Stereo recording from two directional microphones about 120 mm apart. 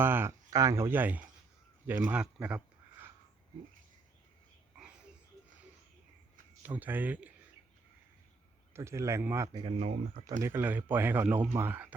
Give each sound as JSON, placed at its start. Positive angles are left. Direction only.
{"t": 0.0, "sound": "speech", "side_deg": -20}
{"t": 6.6, "sound": "speech", "side_deg": -15}
{"t": 8.7, "sound": "speech", "side_deg": -20}
{"t": 9.5, "sound": "speech", "side_deg": -35}
{"t": 9.7, "sound": "speech", "side_deg": -60}
{"t": 10.4, "sound": "speech", "side_deg": -15}